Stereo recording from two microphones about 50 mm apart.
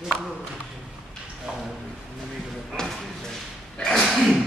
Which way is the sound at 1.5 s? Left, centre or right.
Centre.